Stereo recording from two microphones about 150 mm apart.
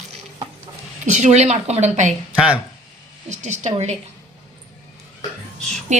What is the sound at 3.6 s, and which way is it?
Speech, 50° right (ahead or behind).